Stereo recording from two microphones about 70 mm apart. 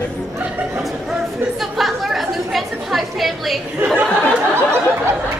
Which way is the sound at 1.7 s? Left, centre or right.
Centre.